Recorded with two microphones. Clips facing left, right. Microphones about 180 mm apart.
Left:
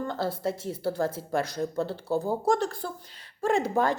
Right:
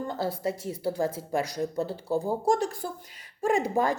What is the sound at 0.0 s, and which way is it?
Speech, 15° right (ahead or behind).